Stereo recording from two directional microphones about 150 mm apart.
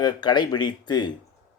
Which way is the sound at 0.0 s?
30° left (ahead or behind).